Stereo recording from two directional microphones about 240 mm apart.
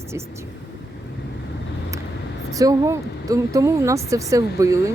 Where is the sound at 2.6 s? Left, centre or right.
Centre.